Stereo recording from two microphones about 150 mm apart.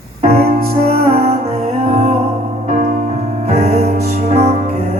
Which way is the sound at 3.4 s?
45° right (ahead or behind).